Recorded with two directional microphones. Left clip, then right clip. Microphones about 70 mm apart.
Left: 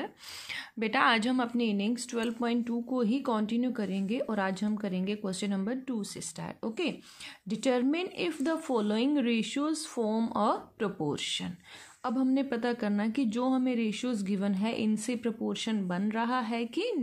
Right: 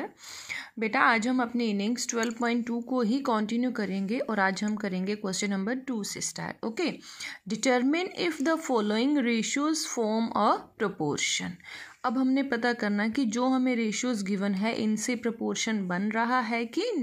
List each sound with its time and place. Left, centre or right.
0.7 s a woman's voice: right